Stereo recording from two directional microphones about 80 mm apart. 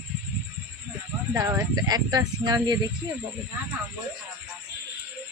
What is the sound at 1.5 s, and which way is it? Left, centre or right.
Speech, right.